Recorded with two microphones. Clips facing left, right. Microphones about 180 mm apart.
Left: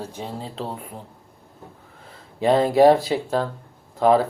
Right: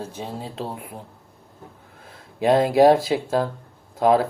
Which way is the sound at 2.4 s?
10° right (ahead or behind).